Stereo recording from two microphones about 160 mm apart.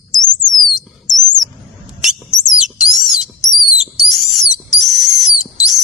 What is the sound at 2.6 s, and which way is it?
Rodents, 5° right (ahead or behind).